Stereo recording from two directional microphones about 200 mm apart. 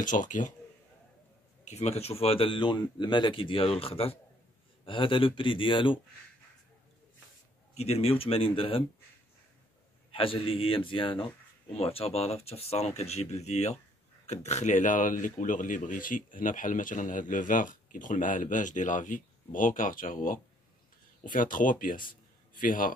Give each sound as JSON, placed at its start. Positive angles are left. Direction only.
{"t": 0.0, "sound": "speech", "side_deg": 40}
{"t": 1.6, "sound": "speech", "side_deg": 35}
{"t": 7.7, "sound": "speech", "side_deg": 30}
{"t": 10.1, "sound": "a man's voice", "side_deg": 25}